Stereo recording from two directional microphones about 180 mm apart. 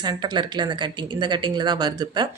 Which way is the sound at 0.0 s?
25° right (ahead or behind).